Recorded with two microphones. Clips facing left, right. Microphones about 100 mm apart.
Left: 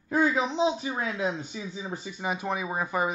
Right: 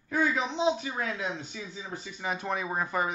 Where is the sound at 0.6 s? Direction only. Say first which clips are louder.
Left 1 dB; 20° left (ahead or behind).